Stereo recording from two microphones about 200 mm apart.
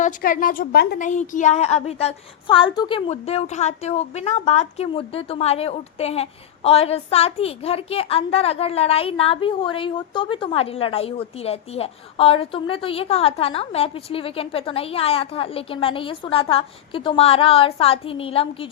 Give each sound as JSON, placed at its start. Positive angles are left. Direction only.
{"t": 0.0, "sound": "a woman's voice", "side_deg": 45}